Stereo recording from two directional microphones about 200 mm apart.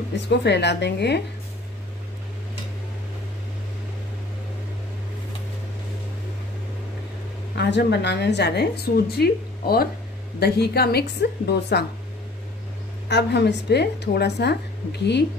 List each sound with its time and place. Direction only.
0.1 s a woman's voice: 60° left (ahead or behind)
7.5 s a woman's voice: 55° left (ahead or behind)
13.1 s a woman's voice: 60° left (ahead or behind)